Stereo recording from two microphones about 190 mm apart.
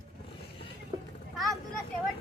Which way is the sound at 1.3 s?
Centre (ahead or behind).